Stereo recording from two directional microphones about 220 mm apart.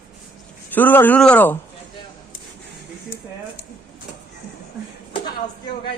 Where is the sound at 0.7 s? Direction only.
10° left (ahead or behind).